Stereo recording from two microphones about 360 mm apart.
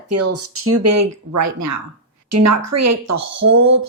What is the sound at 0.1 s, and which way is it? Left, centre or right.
A woman's voice, right.